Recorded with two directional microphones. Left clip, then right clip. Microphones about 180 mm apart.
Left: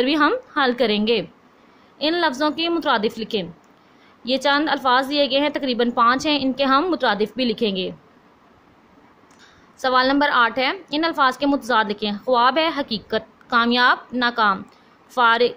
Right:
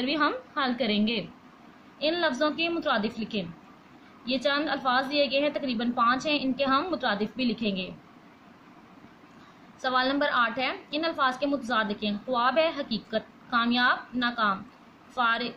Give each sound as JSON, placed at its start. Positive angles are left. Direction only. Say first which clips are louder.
{"t": 0.0, "sound": "a woman's voice", "louder": "left 9 dB", "side_deg": 50}
{"t": 9.8, "sound": "a woman's voice", "louder": "left 8 dB", "side_deg": 55}